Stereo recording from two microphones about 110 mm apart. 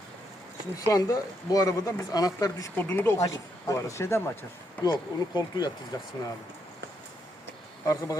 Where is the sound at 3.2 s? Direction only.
30° left (ahead or behind).